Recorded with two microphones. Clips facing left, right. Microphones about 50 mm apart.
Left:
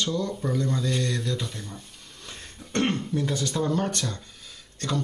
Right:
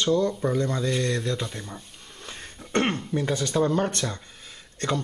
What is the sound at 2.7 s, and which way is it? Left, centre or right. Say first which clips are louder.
Throat clearing: right 1 dB; right.